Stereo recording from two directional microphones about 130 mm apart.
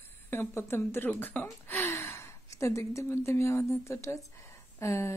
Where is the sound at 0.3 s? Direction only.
20° left (ahead or behind).